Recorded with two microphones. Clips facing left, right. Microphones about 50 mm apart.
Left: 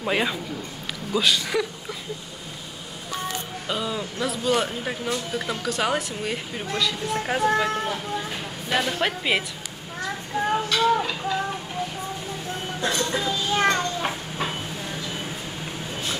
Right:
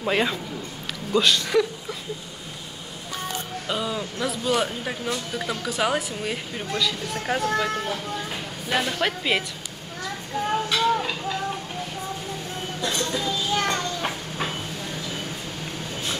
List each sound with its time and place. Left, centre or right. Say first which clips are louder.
0.0 s speech: right 1 dB; centre
3.6 s speech: even; centre
10.5 s a sound: left 1 dB; centre
12.8 s a child's voice: left 2 dB; left
14.0 s train: left 1 dB; centre
15.0 s a sound: even; centre